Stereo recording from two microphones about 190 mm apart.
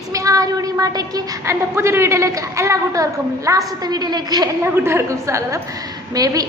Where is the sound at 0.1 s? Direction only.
15° right (ahead or behind).